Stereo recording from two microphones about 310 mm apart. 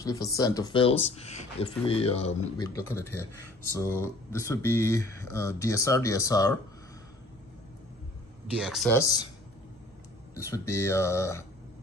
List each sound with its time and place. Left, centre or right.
0.0 s speech: centre
8.5 s speech: centre
10.3 s speech: centre